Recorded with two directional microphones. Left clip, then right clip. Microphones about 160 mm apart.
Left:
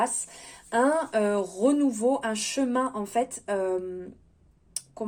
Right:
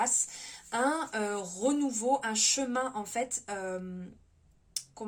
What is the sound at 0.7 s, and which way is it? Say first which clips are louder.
Speech: left 7 dB; 40° left (ahead or behind).